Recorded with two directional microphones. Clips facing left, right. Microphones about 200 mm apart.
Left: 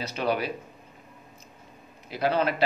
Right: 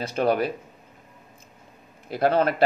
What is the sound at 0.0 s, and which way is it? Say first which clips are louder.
Speech: right 5 dB; 50° right (ahead or behind).